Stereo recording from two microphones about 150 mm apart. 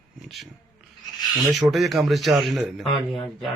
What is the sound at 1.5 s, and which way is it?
Speech, centre (ahead or behind).